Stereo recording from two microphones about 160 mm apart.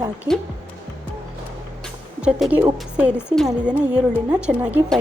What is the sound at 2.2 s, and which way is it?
A woman's voice, 5° right (ahead or behind).